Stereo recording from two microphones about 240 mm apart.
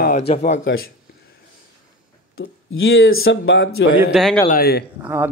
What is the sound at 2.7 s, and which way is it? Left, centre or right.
Speech, left.